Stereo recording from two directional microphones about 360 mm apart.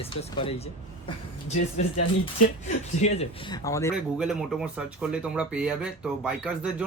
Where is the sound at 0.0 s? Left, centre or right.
Centre.